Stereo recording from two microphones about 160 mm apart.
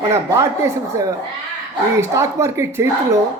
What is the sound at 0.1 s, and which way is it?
Speech, 15° right (ahead or behind).